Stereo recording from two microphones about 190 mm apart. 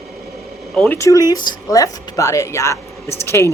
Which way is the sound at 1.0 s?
15° left (ahead or behind).